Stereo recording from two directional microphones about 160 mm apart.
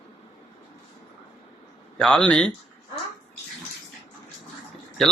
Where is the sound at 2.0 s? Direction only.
5° left (ahead or behind).